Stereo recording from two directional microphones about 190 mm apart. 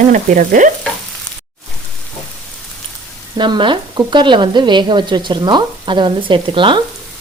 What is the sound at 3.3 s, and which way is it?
Speech, 25° right (ahead or behind).